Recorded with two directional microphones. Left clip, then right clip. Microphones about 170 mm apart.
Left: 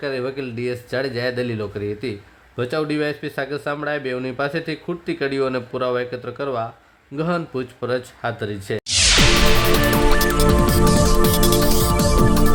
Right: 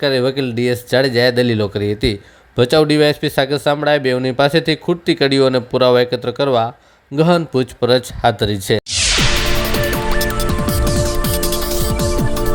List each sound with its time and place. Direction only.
0.0 s speech: 35° right (ahead or behind)
8.9 s music: centre (ahead or behind)